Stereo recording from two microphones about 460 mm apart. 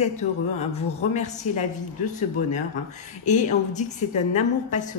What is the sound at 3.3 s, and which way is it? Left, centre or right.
A woman's voice, centre.